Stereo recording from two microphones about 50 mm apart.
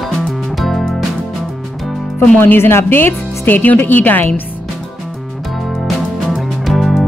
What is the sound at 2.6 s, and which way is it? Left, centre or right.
A woman's voice, left.